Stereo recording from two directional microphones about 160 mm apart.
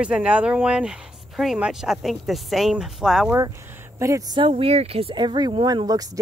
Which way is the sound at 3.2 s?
20° right (ahead or behind).